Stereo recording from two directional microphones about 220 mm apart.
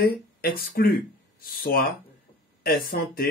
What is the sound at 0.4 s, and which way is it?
Speech, 40° left (ahead or behind).